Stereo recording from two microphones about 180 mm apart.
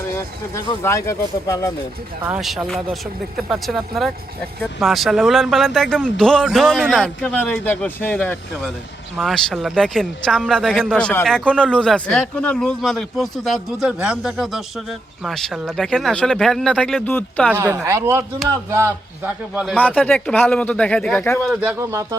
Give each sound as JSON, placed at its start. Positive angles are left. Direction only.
{"t": 0.2, "sound": "speech", "side_deg": 15}
{"t": 2.2, "sound": "speech", "side_deg": -5}
{"t": 17.5, "sound": "a man's voice", "side_deg": -10}
{"t": 19.8, "sound": "speech", "side_deg": 10}
{"t": 21.5, "sound": "a man's voice", "side_deg": -5}